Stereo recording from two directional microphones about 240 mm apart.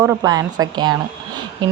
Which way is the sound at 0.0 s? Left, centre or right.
Centre.